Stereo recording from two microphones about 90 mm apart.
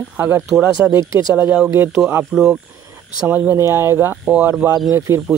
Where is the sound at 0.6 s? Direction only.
40° right (ahead or behind).